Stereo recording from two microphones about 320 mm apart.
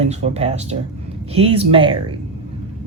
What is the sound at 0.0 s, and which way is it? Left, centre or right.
Speech, centre.